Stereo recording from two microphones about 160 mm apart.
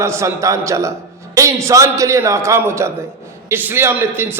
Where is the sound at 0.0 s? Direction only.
15° right (ahead or behind).